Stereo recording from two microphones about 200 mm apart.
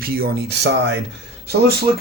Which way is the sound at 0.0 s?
50° right (ahead or behind).